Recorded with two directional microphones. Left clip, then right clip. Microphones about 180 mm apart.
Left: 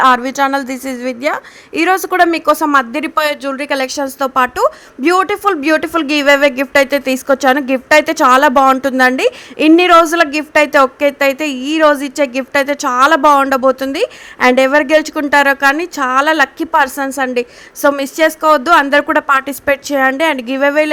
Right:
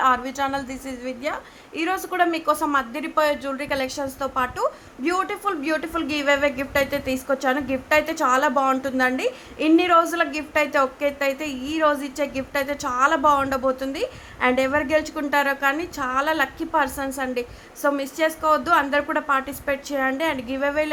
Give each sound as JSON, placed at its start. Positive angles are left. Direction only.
{"t": 0.0, "sound": "a woman's voice", "side_deg": 45}